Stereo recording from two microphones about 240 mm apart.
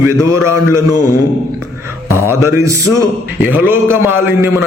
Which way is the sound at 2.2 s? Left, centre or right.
Centre.